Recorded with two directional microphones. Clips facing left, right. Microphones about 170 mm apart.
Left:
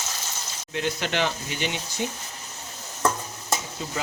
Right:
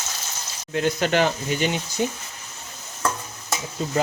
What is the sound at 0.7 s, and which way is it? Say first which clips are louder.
Speech: right 6 dB; 45° right (ahead or behind).